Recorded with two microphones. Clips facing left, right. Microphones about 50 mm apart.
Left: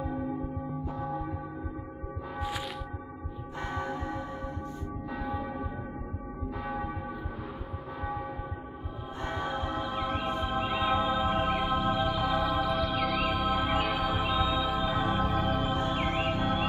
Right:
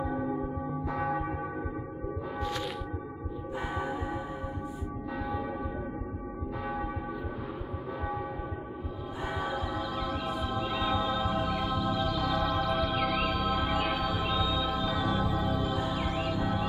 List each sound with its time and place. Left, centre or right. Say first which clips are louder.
0.9 s church bell: right 6 dB; right
2.3 s music: even; centre
3.5 s church bell: even; centre
5.2 s church bell: even; centre
6.6 s church bell: even; centre
8.0 s a sound: left 1 dB; centre
9.2 s music: even; centre
9.8 s music: left 1 dB; left
12.4 s music: even; centre
14.8 s music: left 1 dB; left